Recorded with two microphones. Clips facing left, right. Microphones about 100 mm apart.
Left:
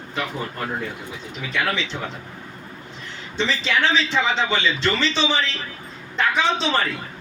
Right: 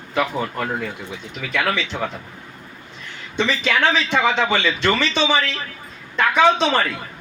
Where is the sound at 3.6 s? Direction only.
55° right (ahead or behind).